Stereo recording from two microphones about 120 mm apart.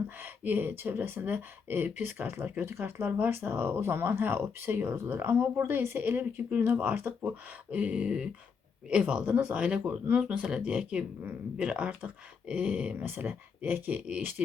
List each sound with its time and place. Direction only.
0.2 s speech: 15° right (ahead or behind)